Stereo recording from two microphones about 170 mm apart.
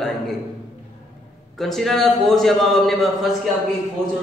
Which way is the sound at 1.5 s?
Centre (ahead or behind).